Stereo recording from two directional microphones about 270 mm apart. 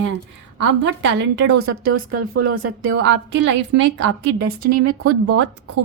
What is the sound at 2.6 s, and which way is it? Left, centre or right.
A woman's voice, right.